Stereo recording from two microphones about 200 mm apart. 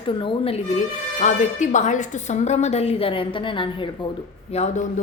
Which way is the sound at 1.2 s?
35° left (ahead or behind).